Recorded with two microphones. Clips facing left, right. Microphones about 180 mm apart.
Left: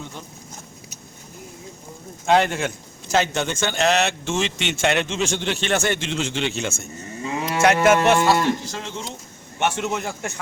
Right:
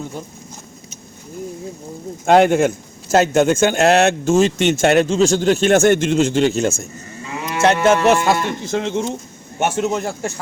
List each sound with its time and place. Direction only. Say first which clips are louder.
2.2 s a man's voice: right 7 dB; 50° right (ahead or behind)
7.2 s moo: left 1 dB; 30° left (ahead or behind)
7.6 s a man's voice: right 3 dB; 30° right (ahead or behind); by 9.0 s 55° right (ahead or behind)
9.6 s a man's voice: right 5 dB; 40° right (ahead or behind)